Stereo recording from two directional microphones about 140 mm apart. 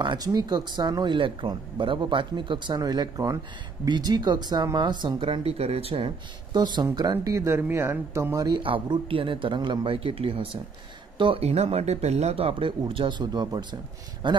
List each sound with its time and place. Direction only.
0.0 s speech: 30° right (ahead or behind)
7.1 s speech: 20° right (ahead or behind)